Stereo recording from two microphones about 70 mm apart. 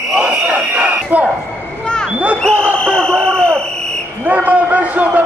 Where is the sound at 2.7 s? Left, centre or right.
Centre.